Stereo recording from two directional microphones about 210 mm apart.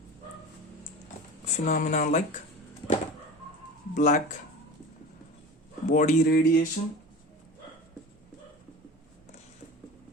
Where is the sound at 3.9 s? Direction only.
35° left (ahead or behind).